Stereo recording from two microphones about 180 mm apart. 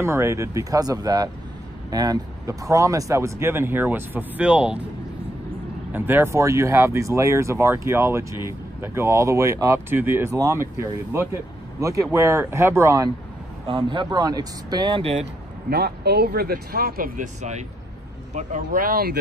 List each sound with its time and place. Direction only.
0.0 s speech: 15° right (ahead or behind)
5.9 s speech: 10° right (ahead or behind)
13.7 s speech: 25° right (ahead or behind)
15.7 s speech: 65° right (ahead or behind)